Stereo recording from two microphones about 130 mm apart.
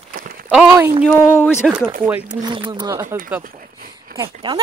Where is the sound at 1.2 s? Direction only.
15° left (ahead or behind).